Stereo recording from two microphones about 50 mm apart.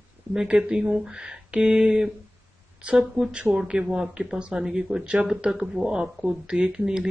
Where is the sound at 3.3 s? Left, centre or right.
Right.